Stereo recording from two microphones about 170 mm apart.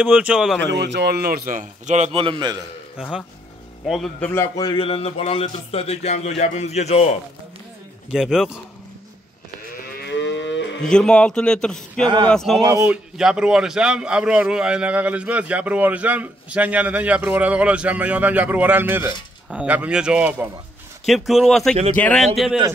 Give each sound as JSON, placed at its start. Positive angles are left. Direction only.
{"t": 0.0, "sound": "a man's voice", "side_deg": -5}
{"t": 0.7, "sound": "a man's voice", "side_deg": -90}
{"t": 3.0, "sound": "a man's voice", "side_deg": 0}
{"t": 4.3, "sound": "a man's voice", "side_deg": 20}
{"t": 8.1, "sound": "a man's voice", "side_deg": 0}
{"t": 10.0, "sound": "moo", "side_deg": 90}
{"t": 10.8, "sound": "a man's voice", "side_deg": 5}
{"t": 12.6, "sound": "a man's voice", "side_deg": -15}